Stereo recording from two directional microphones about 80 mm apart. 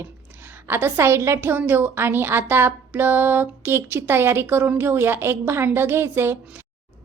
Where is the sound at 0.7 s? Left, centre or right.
Right.